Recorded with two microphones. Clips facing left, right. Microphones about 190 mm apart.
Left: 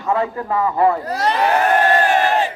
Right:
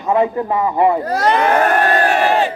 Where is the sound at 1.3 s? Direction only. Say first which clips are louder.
Even; 60° right (ahead or behind).